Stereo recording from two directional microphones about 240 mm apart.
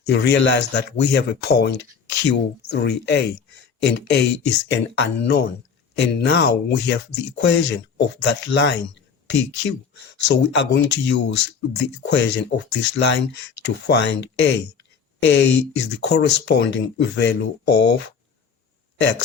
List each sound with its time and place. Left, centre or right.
0.1 s speech: left